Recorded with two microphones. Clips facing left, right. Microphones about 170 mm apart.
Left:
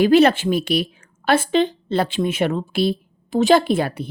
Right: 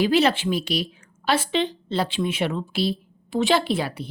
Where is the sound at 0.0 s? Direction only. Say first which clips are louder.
Left 6 dB; 55° left (ahead or behind).